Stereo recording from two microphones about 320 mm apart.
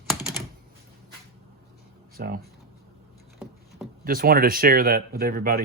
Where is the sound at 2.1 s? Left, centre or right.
Right.